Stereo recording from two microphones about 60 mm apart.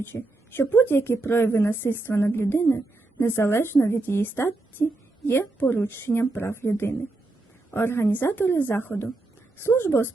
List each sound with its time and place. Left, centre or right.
0.0 s a woman's voice: left
4.0 s a woman's voice: left